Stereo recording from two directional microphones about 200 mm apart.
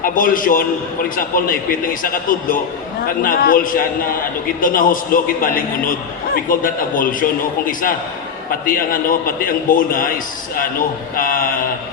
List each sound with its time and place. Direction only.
0.0 s a man's voice: 45° left (ahead or behind)